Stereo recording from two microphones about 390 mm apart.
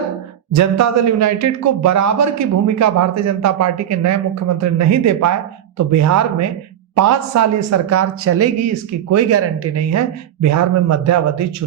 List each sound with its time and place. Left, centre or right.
0.5 s a man's voice: right